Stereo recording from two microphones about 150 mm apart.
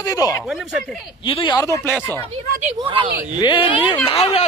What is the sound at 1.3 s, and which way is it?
Speech, 35° left (ahead or behind).